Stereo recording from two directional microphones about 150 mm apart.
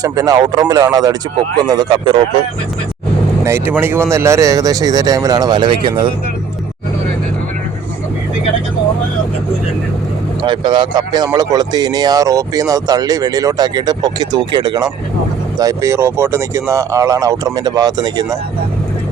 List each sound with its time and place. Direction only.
0.0 s speech: 25° right (ahead or behind)
3.4 s speech: 15° right (ahead or behind); by 6.1 s 30° right (ahead or behind)
10.4 s speech: 30° right (ahead or behind)